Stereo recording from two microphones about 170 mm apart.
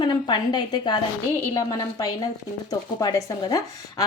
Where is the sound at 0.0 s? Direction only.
25° left (ahead or behind).